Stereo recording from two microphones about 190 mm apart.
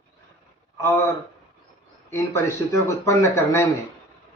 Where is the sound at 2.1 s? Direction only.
15° left (ahead or behind).